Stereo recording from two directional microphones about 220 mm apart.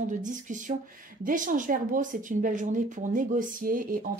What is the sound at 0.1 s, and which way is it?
A woman's voice, 35° right (ahead or behind).